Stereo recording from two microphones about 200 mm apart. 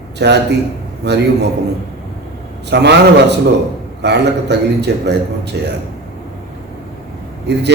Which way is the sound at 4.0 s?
60° right (ahead or behind).